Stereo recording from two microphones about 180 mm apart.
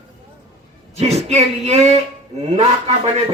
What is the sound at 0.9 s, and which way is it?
Speech, 35° right (ahead or behind).